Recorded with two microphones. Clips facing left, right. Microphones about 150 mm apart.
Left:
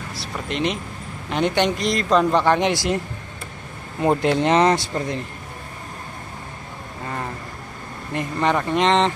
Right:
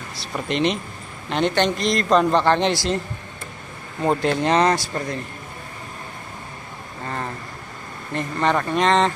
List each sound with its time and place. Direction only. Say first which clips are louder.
0.1 s speech: right 4 dB; 5° left (ahead or behind)
4.0 s speech: left 2 dB; 15° left (ahead or behind)
8.1 s speech: even; 15° left (ahead or behind)